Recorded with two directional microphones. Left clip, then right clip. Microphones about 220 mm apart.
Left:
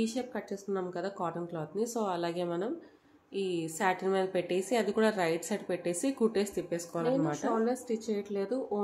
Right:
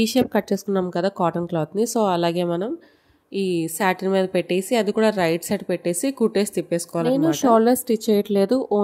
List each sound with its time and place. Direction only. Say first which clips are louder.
0.0 s a woman's voice: right 15 dB; 45° right (ahead or behind)